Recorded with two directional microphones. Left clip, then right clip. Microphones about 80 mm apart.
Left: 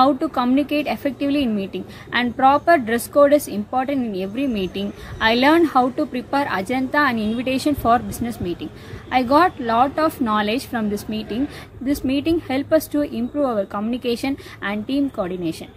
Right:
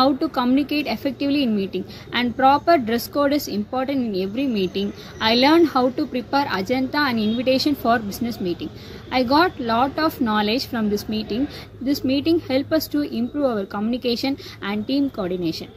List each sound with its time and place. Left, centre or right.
0.0 s a woman's voice: left